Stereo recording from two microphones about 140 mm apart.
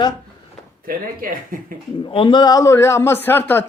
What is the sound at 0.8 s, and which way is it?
Speech, 90° right.